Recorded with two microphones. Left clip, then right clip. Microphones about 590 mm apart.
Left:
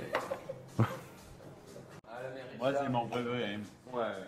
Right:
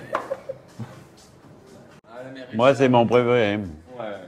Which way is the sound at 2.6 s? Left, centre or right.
Right.